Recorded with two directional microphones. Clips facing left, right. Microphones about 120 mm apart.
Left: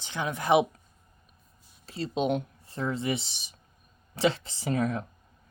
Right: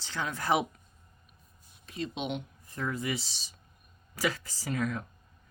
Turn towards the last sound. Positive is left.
turn(degrees=35)  # may be behind; listen again after turning